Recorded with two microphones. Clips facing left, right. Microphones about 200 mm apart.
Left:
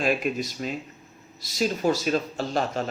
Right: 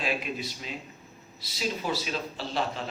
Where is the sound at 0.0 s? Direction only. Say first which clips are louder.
Left 7 dB; 45° left (ahead or behind).